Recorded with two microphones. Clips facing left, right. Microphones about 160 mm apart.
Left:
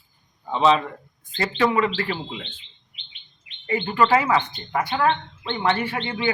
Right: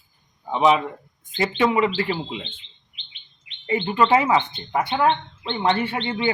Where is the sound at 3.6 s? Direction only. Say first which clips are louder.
Right 1 dB; 20° right (ahead or behind).